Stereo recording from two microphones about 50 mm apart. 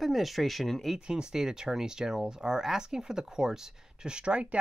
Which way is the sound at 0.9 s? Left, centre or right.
Centre.